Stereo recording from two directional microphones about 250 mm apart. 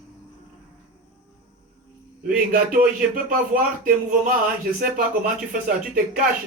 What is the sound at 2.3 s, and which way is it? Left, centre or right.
Speech, right.